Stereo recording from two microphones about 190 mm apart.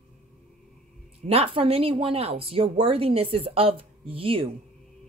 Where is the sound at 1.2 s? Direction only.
30° right (ahead or behind).